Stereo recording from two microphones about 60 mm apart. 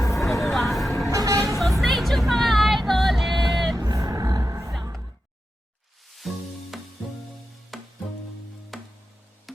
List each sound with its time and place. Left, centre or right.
0.0 s vehicle: left
0.3 s vehicle: centre
1.1 s vehicle: right
1.5 s music: centre
3.8 s vehicle: right
6.1 s music: centre